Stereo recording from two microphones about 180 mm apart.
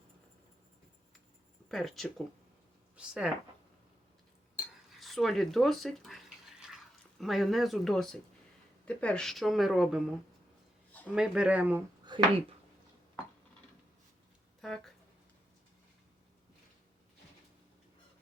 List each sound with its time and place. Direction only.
1.7 s a woman's voice: centre (ahead or behind)
4.5 s cutlery: centre (ahead or behind)
7.2 s a woman's voice: centre (ahead or behind)
11.1 s speech: 5° right (ahead or behind)
12.1 s a sound: 25° right (ahead or behind)
14.6 s a sound: centre (ahead or behind)